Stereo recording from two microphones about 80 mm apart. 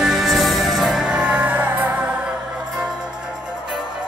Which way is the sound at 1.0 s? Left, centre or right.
Centre.